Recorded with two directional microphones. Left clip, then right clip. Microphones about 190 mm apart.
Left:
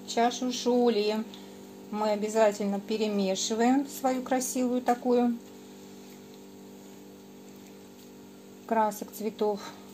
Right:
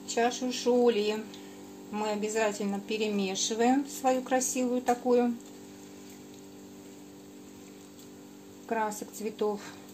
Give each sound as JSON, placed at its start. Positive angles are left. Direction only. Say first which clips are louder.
{"t": 0.1, "sound": "a woman's voice", "louder": "left 2 dB", "side_deg": 20}
{"t": 8.6, "sound": "a woman's voice", "louder": "left 5 dB", "side_deg": 20}